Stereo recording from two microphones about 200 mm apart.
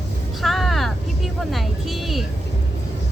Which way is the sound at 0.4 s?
Centre (ahead or behind).